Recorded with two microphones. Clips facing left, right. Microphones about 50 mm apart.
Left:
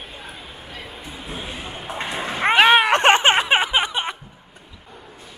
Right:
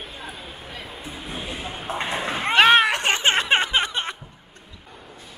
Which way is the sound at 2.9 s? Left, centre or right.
Left.